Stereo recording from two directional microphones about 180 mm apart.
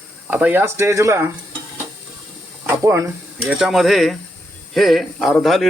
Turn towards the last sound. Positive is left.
turn(degrees=0)  # may be behind; listen again after turning